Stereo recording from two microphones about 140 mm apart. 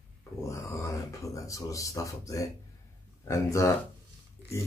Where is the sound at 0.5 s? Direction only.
20° left (ahead or behind).